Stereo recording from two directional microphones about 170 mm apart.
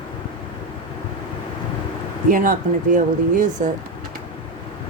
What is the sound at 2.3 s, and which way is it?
A woman's voice, 50° right (ahead or behind).